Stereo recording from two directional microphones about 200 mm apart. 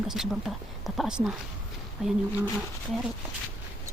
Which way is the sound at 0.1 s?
Centre (ahead or behind).